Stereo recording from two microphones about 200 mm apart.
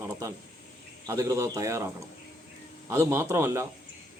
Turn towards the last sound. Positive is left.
turn(degrees=-10)  # may be behind; listen again after turning